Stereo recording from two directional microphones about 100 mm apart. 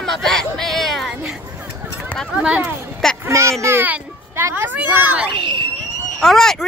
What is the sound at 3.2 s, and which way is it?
A child's voice, 30° right (ahead or behind).